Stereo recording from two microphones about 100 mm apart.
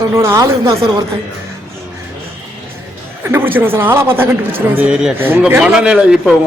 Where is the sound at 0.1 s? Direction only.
25° right (ahead or behind).